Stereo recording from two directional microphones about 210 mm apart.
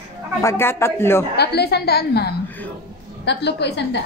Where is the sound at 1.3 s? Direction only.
50° left (ahead or behind).